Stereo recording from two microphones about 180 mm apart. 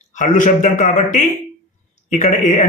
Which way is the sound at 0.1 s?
45° left (ahead or behind).